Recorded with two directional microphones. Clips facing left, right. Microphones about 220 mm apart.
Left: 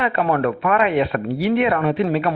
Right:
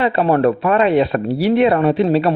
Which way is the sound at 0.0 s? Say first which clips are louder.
Right 5 dB; 30° right (ahead or behind).